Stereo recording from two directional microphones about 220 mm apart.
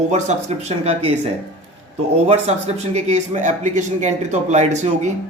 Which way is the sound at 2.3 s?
30° right (ahead or behind).